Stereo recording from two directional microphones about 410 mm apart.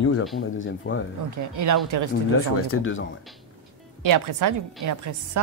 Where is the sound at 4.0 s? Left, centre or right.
Right.